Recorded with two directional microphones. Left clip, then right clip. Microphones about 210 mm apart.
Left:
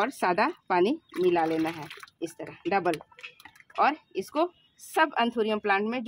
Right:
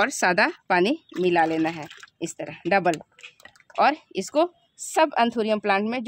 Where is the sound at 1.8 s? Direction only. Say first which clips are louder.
Right 3 dB; 5° right (ahead or behind).